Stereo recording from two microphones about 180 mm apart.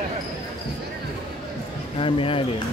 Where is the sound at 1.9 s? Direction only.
30° left (ahead or behind).